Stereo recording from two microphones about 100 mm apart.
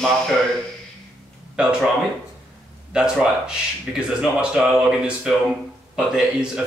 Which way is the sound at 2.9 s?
10° right (ahead or behind).